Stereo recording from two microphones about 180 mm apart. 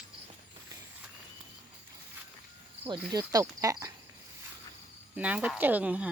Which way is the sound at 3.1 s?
20° right (ahead or behind).